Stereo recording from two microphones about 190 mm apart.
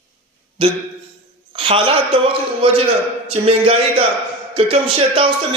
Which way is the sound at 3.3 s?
30° right (ahead or behind).